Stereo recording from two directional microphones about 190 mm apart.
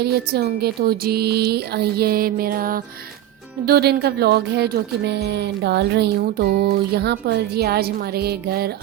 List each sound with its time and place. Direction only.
0.0 s speech: 55° right (ahead or behind)